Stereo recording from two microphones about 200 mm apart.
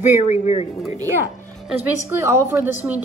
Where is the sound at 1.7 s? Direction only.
10° right (ahead or behind).